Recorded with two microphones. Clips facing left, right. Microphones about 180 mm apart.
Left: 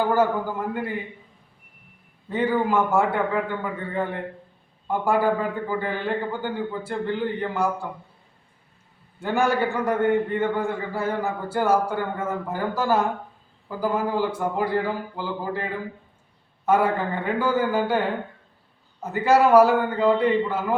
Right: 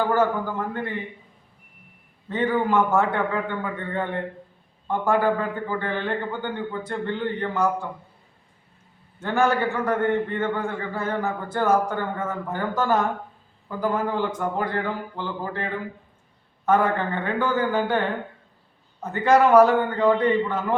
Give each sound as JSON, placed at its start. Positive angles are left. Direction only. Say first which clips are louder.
{"t": 0.0, "sound": "a man's voice", "louder": "left 1 dB", "side_deg": 10}
{"t": 2.3, "sound": "a man's voice", "louder": "even", "side_deg": 10}
{"t": 9.2, "sound": "a man's voice", "louder": "even", "side_deg": 15}
{"t": 16.6, "sound": "a man's voice", "louder": "even", "side_deg": 10}
{"t": 19.0, "sound": "a man's voice", "louder": "even", "side_deg": 5}